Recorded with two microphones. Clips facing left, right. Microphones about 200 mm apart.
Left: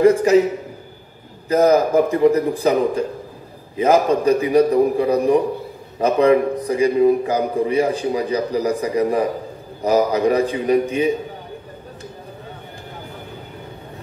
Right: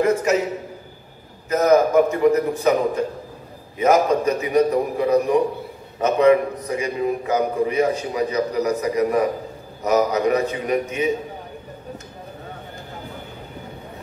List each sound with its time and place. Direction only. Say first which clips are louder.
0.0 s a man's voice: left 6 dB; 30° left (ahead or behind)
1.5 s a man's voice: left 1 dB; 35° left (ahead or behind)
3.7 s a man's voice: left 1 dB; 30° left (ahead or behind)